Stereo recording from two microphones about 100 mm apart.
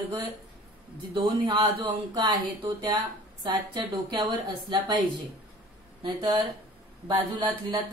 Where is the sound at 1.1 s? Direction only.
55° right (ahead or behind).